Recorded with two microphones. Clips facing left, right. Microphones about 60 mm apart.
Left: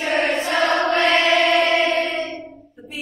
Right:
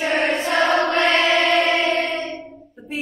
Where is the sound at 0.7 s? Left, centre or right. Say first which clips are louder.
Even; centre.